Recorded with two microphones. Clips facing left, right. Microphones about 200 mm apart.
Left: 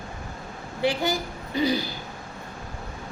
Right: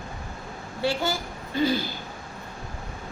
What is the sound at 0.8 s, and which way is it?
A woman's voice, 20° left (ahead or behind).